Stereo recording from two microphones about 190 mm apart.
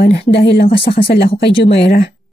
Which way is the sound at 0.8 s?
30° left (ahead or behind).